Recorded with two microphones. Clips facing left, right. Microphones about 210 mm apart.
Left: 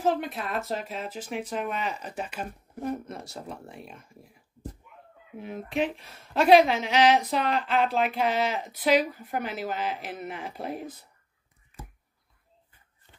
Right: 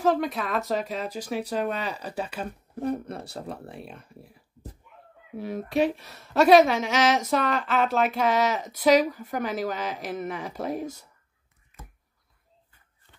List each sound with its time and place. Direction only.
0.3 s speech: 40° right (ahead or behind)
2.9 s speech: 60° right (ahead or behind)
3.3 s speech: 35° right (ahead or behind)
3.6 s speech: 60° right (ahead or behind)
5.4 s speech: 40° right (ahead or behind)